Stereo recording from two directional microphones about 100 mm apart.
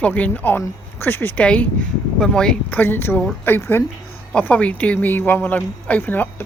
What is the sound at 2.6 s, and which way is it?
Speech, 20° left (ahead or behind).